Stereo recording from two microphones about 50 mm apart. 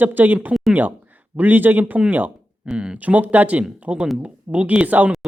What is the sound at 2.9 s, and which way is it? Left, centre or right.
Speech, right.